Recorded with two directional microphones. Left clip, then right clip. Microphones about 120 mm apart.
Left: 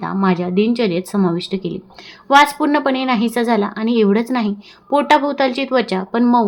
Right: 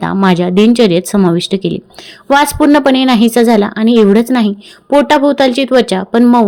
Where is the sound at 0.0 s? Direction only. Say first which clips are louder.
Right 7 dB; 75° right (ahead or behind).